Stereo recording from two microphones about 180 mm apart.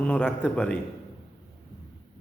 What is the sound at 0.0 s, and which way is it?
Speech, 5° left (ahead or behind).